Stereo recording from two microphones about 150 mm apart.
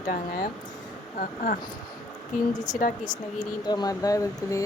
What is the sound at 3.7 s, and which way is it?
Speech, 25° left (ahead or behind).